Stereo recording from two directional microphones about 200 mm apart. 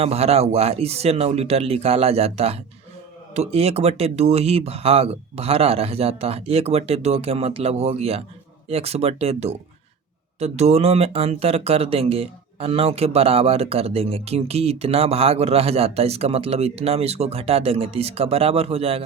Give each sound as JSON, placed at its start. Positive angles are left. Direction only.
{"t": 0.0, "sound": "speech", "side_deg": -30}